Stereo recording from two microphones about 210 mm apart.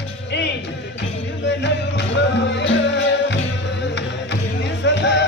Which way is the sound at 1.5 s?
55° left (ahead or behind).